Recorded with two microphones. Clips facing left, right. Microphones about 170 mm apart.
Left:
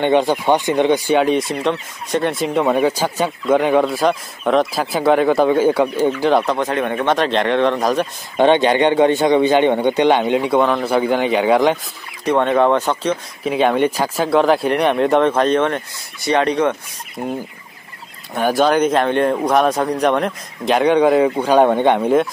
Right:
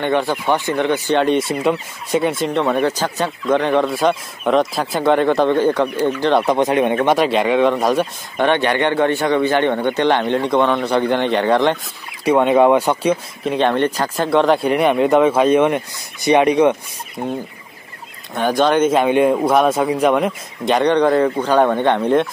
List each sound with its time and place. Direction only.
0.0 s speech: 20° left (ahead or behind)
1.2 s speech: centre (ahead or behind)
6.4 s speech: 15° right (ahead or behind)
8.4 s speech: 20° left (ahead or behind)
12.3 s speech: 10° right (ahead or behind)
13.4 s speech: 5° left (ahead or behind); by 16.7 s 15° right (ahead or behind)
17.2 s speech: 5° left (ahead or behind)